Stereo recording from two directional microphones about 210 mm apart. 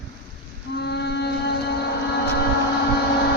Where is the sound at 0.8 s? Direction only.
55° left (ahead or behind).